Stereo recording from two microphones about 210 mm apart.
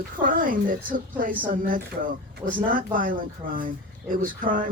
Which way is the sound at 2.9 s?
40° right (ahead or behind).